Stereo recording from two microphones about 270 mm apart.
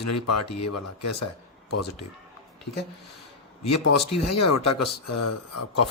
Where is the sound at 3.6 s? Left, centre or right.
Left.